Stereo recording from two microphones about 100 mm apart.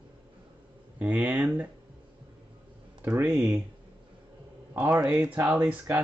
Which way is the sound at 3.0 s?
20° right (ahead or behind).